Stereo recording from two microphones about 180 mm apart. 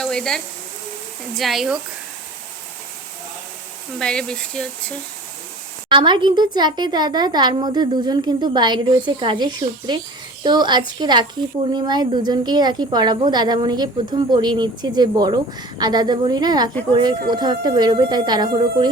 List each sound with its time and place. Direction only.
0.0 s speech: 5° left (ahead or behind)
3.9 s speech: 5° left (ahead or behind)
5.9 s speech: 25° right (ahead or behind)